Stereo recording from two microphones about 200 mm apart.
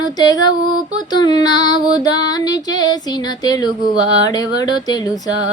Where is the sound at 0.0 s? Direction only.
20° left (ahead or behind).